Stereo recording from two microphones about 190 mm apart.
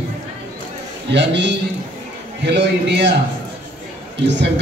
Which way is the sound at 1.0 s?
65° right (ahead or behind).